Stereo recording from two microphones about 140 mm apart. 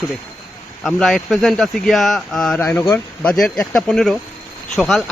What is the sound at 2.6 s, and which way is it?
Speech, 20° left (ahead or behind).